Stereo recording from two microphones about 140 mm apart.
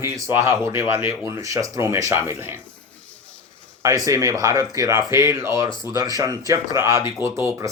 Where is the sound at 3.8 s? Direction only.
25° right (ahead or behind).